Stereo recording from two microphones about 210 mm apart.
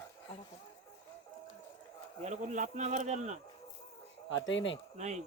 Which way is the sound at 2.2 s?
35° right (ahead or behind).